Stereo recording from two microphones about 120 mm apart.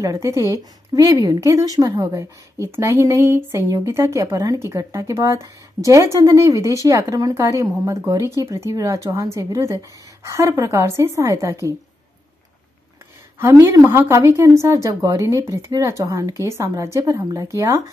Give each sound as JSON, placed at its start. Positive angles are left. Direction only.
{"t": 0.0, "sound": "speech", "side_deg": -25}
{"t": 13.4, "sound": "speech", "side_deg": -25}